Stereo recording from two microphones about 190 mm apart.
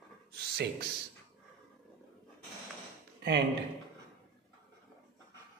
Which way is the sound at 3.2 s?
65° right (ahead or behind).